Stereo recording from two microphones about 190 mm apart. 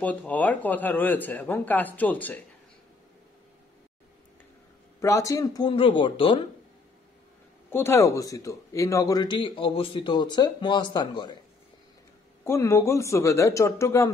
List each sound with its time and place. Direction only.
0.0 s speech: 10° left (ahead or behind)
5.0 s speech: 15° left (ahead or behind)
7.7 s speech: 15° left (ahead or behind)
12.4 s speech: 15° left (ahead or behind)